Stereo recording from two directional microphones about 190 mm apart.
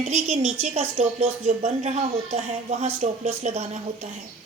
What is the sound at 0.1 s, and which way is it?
A woman's voice, 35° right (ahead or behind).